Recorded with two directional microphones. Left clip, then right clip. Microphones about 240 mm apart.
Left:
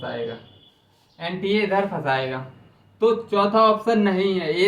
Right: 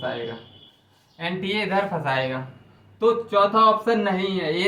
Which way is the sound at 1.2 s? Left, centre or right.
Centre.